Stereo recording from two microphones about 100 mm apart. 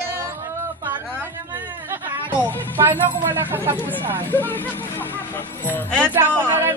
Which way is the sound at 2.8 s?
20° right (ahead or behind).